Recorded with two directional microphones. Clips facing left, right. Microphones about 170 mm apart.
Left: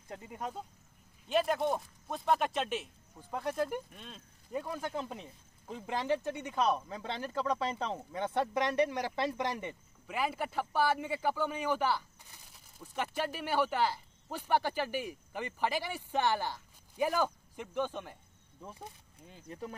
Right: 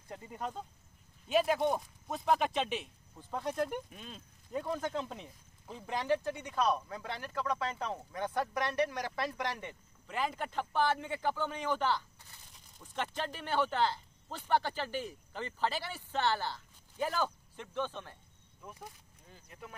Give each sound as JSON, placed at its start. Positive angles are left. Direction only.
{"t": 0.1, "sound": "a man's voice", "side_deg": 10}
{"t": 1.3, "sound": "a man's voice", "side_deg": 0}
{"t": 10.0, "sound": "a man's voice", "side_deg": 10}
{"t": 18.6, "sound": "a sound", "side_deg": 25}
{"t": 19.4, "sound": "speech", "side_deg": 35}